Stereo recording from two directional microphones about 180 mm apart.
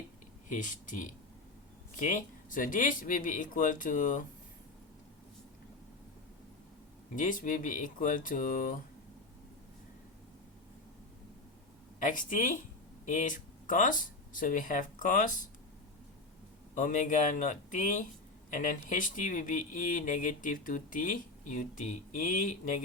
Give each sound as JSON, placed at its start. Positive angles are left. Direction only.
{"t": 0.4, "sound": "speech", "side_deg": 45}
{"t": 7.2, "sound": "speech", "side_deg": 45}
{"t": 11.9, "sound": "speech", "side_deg": 45}
{"t": 16.7, "sound": "speech", "side_deg": 45}